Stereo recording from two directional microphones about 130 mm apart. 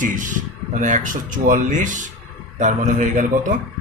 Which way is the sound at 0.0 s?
80° right.